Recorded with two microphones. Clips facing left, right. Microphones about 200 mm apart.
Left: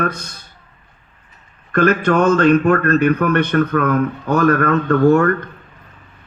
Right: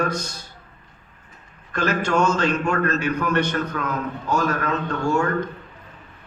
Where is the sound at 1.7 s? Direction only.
55° left (ahead or behind).